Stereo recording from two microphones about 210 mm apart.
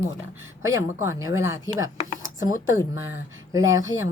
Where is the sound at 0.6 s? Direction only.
15° right (ahead or behind).